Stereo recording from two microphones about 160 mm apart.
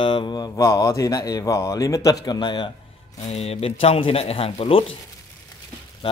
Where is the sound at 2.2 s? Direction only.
25° left (ahead or behind).